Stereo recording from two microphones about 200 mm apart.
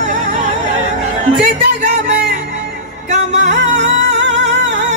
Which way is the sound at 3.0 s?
35° right (ahead or behind).